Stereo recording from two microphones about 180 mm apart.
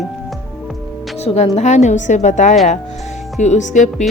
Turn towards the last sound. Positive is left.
turn(degrees=40)  # may be behind; listen again after turning